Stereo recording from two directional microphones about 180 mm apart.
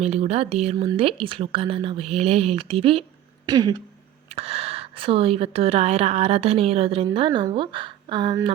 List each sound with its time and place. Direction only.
0.0 s speech: 35° right (ahead or behind)
3.4 s a sound: 20° right (ahead or behind)
4.3 s speech: 35° right (ahead or behind)